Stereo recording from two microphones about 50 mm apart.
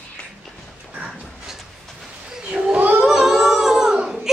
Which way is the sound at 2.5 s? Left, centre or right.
Right.